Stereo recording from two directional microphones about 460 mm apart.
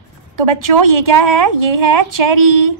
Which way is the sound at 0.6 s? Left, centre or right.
Right.